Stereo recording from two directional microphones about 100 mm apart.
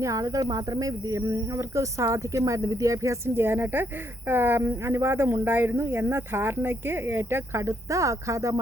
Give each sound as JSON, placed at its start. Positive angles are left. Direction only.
{"t": 0.0, "sound": "speech", "side_deg": -35}